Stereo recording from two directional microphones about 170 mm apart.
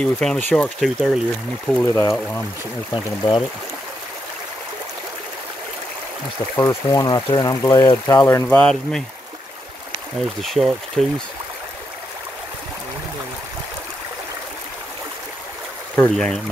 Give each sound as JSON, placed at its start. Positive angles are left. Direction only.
{"t": 0.0, "sound": "speech", "side_deg": 5}
{"t": 2.9, "sound": "speech", "side_deg": 30}
{"t": 6.5, "sound": "speech", "side_deg": 20}
{"t": 8.3, "sound": "speech", "side_deg": 10}
{"t": 10.4, "sound": "speech", "side_deg": 0}
{"t": 16.0, "sound": "speech", "side_deg": 5}